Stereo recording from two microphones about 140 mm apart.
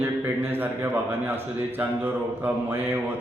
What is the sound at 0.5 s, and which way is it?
Speech, 15° right (ahead or behind).